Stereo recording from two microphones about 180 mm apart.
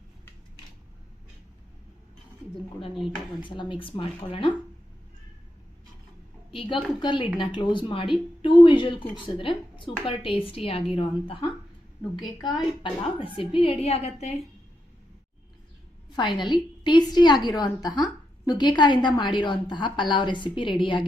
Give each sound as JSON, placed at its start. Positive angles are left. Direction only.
{"t": 3.4, "sound": "a woman's voice", "side_deg": 25}
{"t": 6.5, "sound": "a woman's voice", "side_deg": 30}
{"t": 16.4, "sound": "a woman's voice", "side_deg": 25}